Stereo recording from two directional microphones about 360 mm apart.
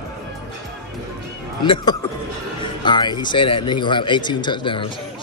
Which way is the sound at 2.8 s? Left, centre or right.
Centre.